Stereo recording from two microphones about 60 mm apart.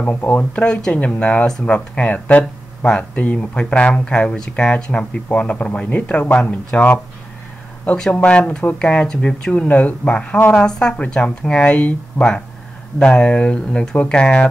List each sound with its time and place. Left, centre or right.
0.0 s speech: left
8.1 s speech: left